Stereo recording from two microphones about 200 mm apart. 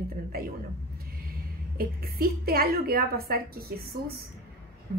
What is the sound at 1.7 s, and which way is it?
Speech, 50° right (ahead or behind).